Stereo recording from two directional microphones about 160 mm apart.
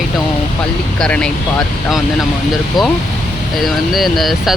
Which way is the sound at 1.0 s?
5° left (ahead or behind).